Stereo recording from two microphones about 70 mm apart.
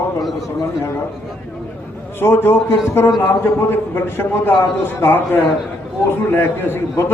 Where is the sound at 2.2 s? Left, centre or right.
Left.